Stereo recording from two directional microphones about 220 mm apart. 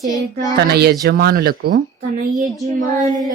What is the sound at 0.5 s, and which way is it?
Speech, 45° right (ahead or behind).